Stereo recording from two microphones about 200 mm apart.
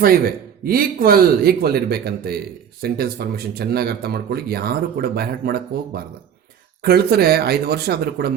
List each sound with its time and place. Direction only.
0.6 s speech: 50° right (ahead or behind)